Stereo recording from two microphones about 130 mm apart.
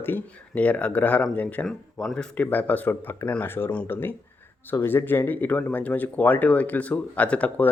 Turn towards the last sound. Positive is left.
turn(degrees=10)  # may be behind; listen again after turning